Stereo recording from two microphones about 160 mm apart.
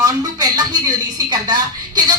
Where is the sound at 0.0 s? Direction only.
25° right (ahead or behind).